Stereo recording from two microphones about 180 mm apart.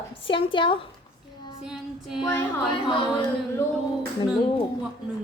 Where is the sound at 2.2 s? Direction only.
10° left (ahead or behind).